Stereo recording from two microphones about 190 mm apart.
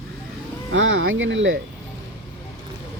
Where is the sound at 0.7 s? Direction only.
85° right.